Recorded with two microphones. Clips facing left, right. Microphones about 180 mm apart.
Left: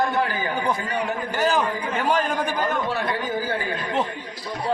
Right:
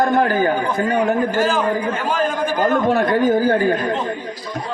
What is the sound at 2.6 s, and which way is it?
Speech, 45° right (ahead or behind).